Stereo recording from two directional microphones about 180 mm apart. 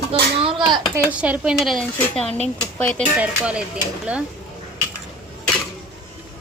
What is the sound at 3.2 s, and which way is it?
Speech, 5° right (ahead or behind).